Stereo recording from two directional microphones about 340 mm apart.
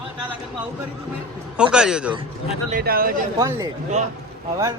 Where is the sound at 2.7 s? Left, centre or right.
Right.